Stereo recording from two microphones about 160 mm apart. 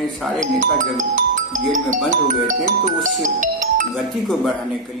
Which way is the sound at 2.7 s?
55° right (ahead or behind).